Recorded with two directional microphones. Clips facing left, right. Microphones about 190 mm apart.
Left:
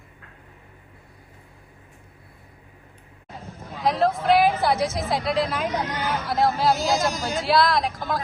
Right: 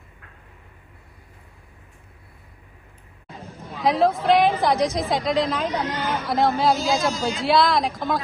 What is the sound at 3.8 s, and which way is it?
Speech, centre (ahead or behind).